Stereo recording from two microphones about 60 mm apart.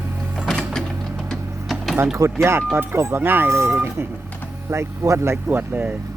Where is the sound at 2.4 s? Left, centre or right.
Right.